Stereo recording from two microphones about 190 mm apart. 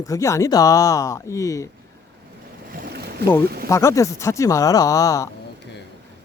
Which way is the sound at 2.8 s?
55° right (ahead or behind).